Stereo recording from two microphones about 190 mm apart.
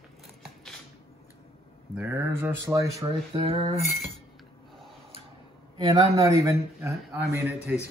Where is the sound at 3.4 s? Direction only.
30° right (ahead or behind).